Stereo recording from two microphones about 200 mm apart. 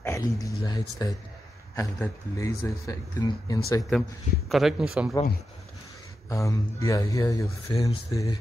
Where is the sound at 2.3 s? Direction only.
15° left (ahead or behind).